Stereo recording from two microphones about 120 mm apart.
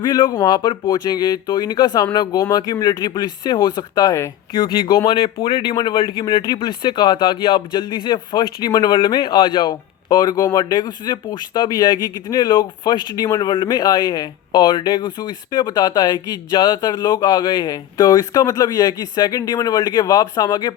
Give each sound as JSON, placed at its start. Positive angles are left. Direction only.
{"t": 0.0, "sound": "speech", "side_deg": 35}
{"t": 4.5, "sound": "speech", "side_deg": 45}
{"t": 9.0, "sound": "speech", "side_deg": 45}
{"t": 13.2, "sound": "speech", "side_deg": 25}
{"t": 13.5, "sound": "speech", "side_deg": 40}